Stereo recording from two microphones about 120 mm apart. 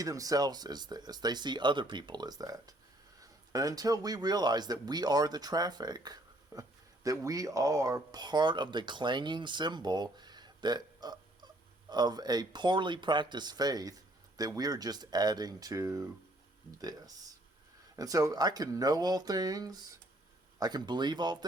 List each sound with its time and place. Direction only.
0.0 s speech: 30° right (ahead or behind)
17.9 s speech: 30° right (ahead or behind)